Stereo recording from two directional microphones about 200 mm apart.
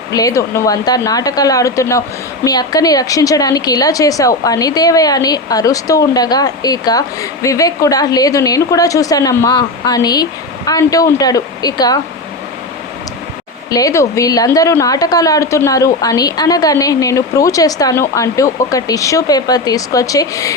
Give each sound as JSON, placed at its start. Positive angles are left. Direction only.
{"t": 0.1, "sound": "speech", "side_deg": 15}
{"t": 13.7, "sound": "speech", "side_deg": 15}